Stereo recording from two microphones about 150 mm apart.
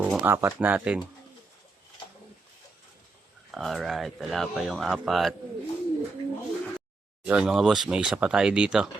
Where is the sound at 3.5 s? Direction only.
Centre (ahead or behind).